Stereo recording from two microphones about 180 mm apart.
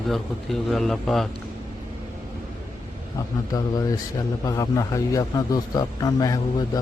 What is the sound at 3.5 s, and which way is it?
A man's voice, 20° left (ahead or behind).